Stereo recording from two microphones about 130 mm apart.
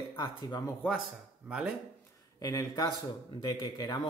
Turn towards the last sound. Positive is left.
turn(degrees=35)  # may be behind; listen again after turning